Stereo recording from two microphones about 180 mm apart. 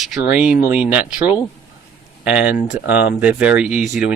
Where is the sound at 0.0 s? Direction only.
Centre (ahead or behind).